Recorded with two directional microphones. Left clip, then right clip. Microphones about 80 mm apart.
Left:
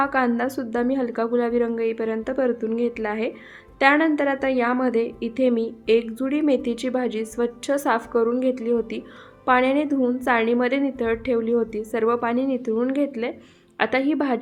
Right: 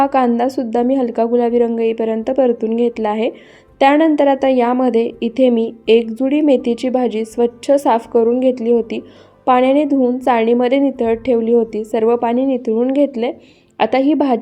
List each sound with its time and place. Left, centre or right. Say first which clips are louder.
0.0 s a woman's voice: right 8 dB; right